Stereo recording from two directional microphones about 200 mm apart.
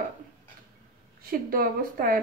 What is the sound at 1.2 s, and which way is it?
Speech, 45° right (ahead or behind).